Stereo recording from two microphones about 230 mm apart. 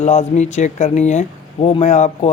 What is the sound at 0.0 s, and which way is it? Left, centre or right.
Speech, left.